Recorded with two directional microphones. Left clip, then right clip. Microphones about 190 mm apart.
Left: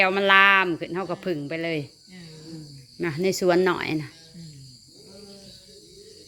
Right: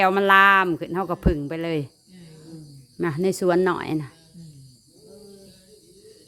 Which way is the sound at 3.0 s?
25° right (ahead or behind).